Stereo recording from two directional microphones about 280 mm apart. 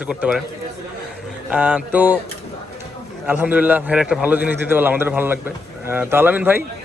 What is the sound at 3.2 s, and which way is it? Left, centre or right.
A man's voice, centre.